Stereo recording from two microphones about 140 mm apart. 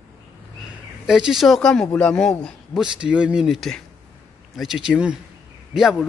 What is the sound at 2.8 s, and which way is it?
A man's voice, 10° right (ahead or behind).